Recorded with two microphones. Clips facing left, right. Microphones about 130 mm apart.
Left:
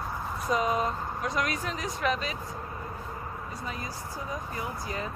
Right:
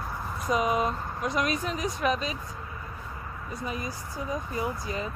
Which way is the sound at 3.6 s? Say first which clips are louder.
Right 6 dB; 20° right (ahead or behind).